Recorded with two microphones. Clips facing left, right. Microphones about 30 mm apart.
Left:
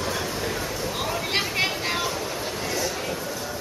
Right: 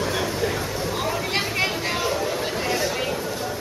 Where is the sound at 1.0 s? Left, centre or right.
Centre.